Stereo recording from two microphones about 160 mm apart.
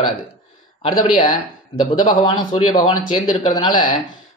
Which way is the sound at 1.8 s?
30° left (ahead or behind).